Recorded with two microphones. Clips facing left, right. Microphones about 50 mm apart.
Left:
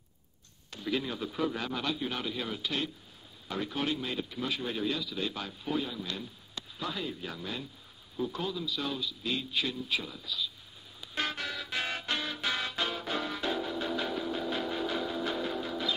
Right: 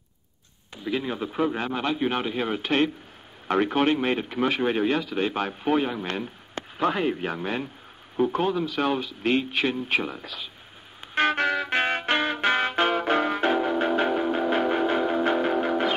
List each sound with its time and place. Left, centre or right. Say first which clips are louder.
0.8 s a man's voice: right 5 dB; right
11.1 s music: right 12 dB; right